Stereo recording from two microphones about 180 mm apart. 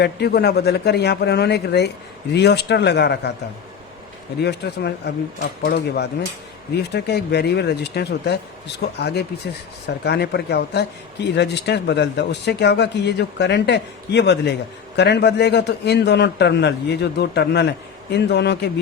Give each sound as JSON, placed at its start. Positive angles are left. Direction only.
{"t": 0.0, "sound": "speech", "side_deg": 65}
{"t": 4.4, "sound": "speech", "side_deg": 65}